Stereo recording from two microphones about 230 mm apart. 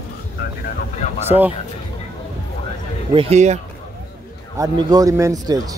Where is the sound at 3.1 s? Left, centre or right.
Right.